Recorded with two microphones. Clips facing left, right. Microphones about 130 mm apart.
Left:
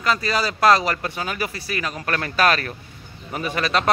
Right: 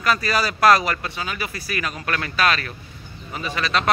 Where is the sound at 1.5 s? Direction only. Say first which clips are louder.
Even; 30° left (ahead or behind).